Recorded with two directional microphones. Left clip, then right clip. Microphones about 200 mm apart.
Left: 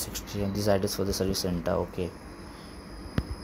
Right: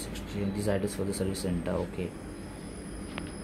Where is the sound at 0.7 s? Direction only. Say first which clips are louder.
Left 5 dB; 15° left (ahead or behind).